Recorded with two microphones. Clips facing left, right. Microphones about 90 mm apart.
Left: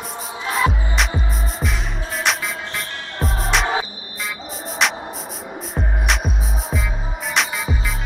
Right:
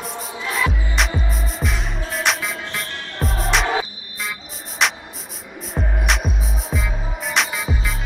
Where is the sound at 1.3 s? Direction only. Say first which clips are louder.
Even; centre (ahead or behind).